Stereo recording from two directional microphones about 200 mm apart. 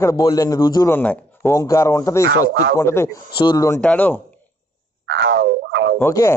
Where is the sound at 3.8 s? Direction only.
5° left (ahead or behind).